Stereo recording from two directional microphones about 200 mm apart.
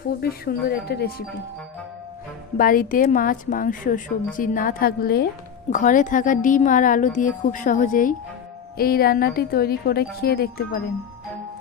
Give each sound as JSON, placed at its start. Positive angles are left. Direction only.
{"t": 0.2, "sound": "a woman's voice", "side_deg": 50}
{"t": 2.6, "sound": "a woman's voice", "side_deg": 45}